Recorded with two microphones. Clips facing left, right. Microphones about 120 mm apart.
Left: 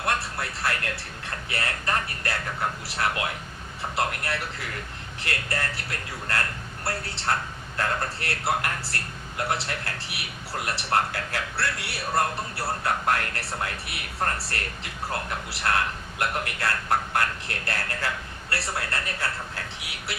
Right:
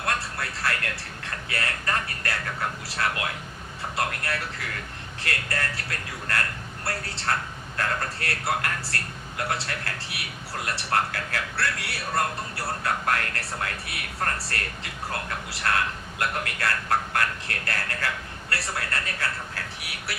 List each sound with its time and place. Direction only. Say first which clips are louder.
0.0 s music: left 1 dB; 25° left (ahead or behind)
1.5 s a man's voice: left 1 dB; 25° left (ahead or behind)